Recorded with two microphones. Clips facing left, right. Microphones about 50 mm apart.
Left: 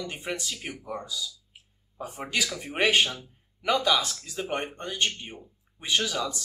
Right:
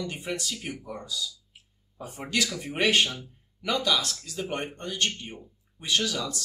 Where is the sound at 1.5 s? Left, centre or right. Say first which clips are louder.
Left 1 dB; centre.